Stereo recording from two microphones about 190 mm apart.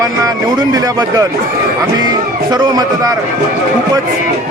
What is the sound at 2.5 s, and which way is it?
Speech, 20° right (ahead or behind).